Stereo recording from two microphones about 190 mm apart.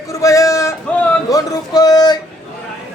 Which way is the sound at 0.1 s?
15° left (ahead or behind).